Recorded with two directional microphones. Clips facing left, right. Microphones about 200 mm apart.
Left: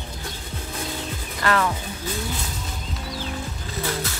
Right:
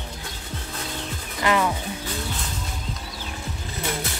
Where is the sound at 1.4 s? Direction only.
15° right (ahead or behind).